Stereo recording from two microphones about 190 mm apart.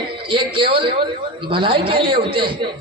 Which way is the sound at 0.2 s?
25° right (ahead or behind).